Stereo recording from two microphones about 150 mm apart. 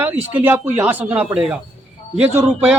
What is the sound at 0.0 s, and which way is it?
A man's voice, 15° right (ahead or behind).